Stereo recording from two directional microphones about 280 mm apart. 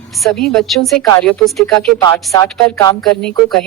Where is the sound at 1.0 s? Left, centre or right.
Centre.